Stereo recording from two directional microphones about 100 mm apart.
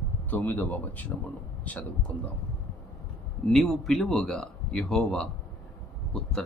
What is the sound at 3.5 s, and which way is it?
Speech, centre (ahead or behind).